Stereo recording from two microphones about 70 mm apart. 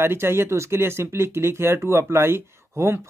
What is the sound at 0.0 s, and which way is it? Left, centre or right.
Speech, right.